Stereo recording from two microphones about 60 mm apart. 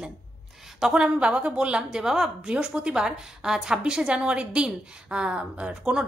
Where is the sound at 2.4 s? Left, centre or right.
Centre.